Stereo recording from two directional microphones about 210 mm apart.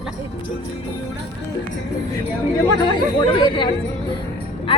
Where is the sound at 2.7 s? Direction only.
20° left (ahead or behind).